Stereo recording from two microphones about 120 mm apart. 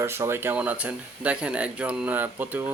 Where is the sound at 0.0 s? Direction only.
20° right (ahead or behind).